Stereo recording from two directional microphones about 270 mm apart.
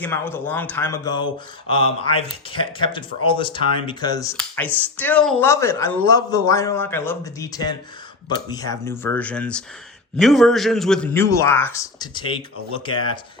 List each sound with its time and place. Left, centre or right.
0.0 s a man's voice: centre